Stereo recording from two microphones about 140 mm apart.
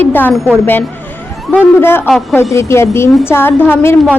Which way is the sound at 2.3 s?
20° left (ahead or behind).